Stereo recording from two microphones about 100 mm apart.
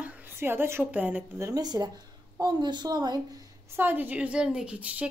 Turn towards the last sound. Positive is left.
turn(degrees=-15)  # may be behind; listen again after turning